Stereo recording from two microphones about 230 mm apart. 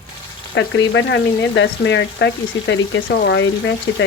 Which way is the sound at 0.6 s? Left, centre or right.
Left.